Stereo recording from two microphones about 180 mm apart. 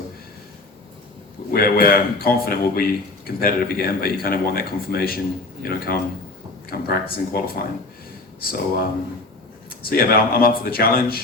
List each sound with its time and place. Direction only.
1.5 s a man's voice: 60° left (ahead or behind)